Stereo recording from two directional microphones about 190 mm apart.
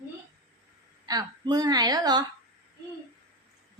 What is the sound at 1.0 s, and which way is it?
A woman's voice, 20° right (ahead or behind).